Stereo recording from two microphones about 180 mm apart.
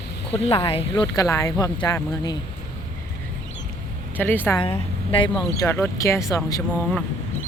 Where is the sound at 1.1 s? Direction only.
20° left (ahead or behind).